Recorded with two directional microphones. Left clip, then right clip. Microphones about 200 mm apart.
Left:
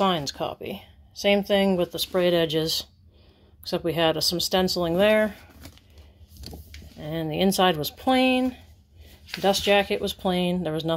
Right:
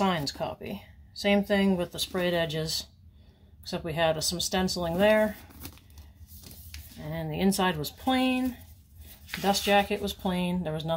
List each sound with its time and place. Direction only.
0.0 s speech: 40° left (ahead or behind)
7.1 s speech: 40° left (ahead or behind)